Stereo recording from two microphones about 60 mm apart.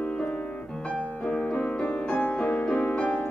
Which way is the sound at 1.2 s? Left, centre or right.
Centre.